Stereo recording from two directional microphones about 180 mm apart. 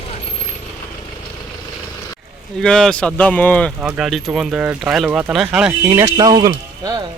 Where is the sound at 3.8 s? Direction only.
5° right (ahead or behind).